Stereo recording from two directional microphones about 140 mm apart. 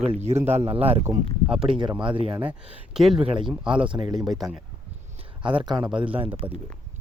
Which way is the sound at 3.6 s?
35° right (ahead or behind).